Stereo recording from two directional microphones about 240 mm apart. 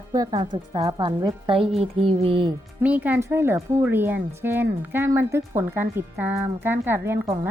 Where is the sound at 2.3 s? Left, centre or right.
Right.